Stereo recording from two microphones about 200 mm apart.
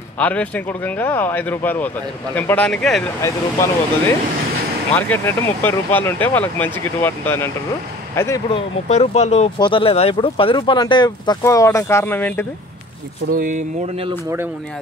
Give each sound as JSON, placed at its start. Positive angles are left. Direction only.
{"t": 0.2, "sound": "speech", "side_deg": 5}
{"t": 4.9, "sound": "speech", "side_deg": 10}
{"t": 8.5, "sound": "speech", "side_deg": 30}
{"t": 13.3, "sound": "speech", "side_deg": -40}